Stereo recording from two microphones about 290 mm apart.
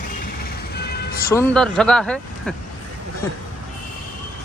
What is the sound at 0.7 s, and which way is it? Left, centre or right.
Vehicle, left.